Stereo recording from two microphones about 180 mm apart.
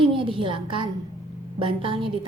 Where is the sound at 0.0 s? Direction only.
30° right (ahead or behind).